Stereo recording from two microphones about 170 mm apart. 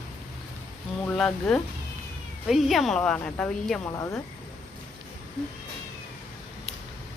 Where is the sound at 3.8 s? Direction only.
20° left (ahead or behind).